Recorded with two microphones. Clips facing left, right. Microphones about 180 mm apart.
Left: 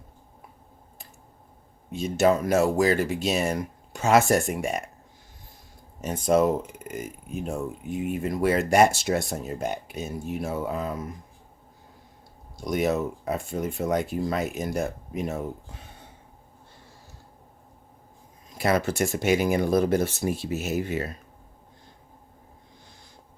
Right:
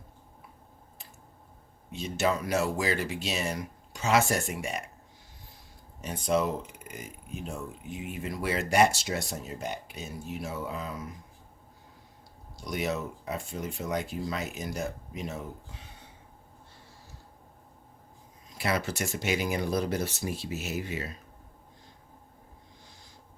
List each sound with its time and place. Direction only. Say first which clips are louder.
1.9 s speech: left 7 dB; 45° left (ahead or behind)
6.0 s speech: left 6 dB; 45° left (ahead or behind)
12.5 s speech: left 7 dB; 50° left (ahead or behind)
18.5 s speech: left 6 dB; 45° left (ahead or behind)